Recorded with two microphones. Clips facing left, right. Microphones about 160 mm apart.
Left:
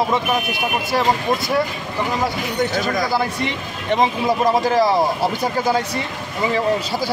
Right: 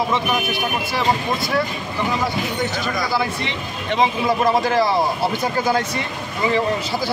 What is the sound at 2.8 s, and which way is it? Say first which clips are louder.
Speech: left 2 dB; 45° left (ahead or behind).